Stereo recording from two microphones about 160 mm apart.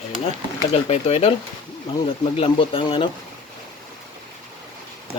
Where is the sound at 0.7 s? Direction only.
40° left (ahead or behind).